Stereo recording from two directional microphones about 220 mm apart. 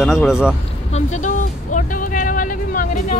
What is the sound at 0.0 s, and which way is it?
Speech, centre (ahead or behind).